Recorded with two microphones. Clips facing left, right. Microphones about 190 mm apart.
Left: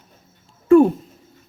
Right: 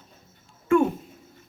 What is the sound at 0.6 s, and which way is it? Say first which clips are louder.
Speech: left 8 dB; 35° left (ahead or behind).